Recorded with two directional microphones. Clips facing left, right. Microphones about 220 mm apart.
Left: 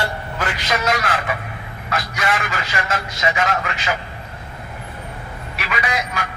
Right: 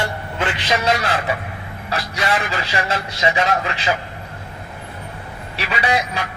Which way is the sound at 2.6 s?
35° right (ahead or behind).